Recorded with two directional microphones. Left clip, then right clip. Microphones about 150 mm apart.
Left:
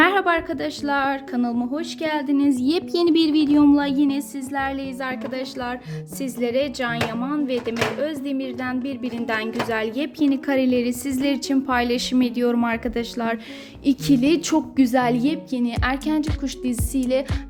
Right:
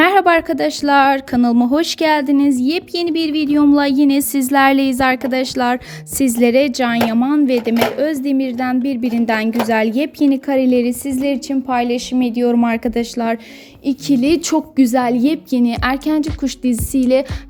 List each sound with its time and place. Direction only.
0.0 s a sound: 30° right (ahead or behind)
0.3 s a woman's voice: 45° right (ahead or behind)
2.3 s speech: 35° right (ahead or behind)
4.2 s a woman's voice: 65° right (ahead or behind); by 13.4 s 25° right (ahead or behind)
13.9 s a woman's voice: 10° left (ahead or behind)
14.2 s speech: 20° right (ahead or behind)
15.2 s a woman's voice: 45° right (ahead or behind)